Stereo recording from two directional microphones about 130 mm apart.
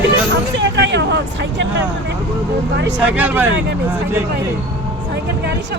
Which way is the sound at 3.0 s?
10° right (ahead or behind).